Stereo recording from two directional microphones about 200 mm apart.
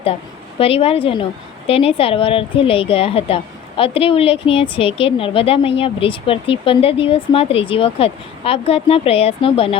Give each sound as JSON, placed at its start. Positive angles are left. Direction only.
{"t": 0.6, "sound": "a woman's voice", "side_deg": 30}